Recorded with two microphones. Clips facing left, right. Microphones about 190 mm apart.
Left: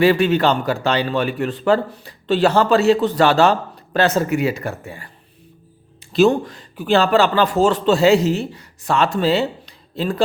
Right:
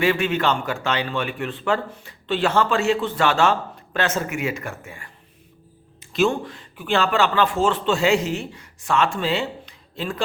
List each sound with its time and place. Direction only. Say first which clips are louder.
0.0 s a man's voice: left 6 dB; 35° left (ahead or behind)